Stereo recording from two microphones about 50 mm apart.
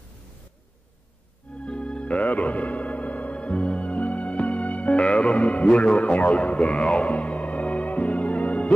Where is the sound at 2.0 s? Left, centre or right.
Left.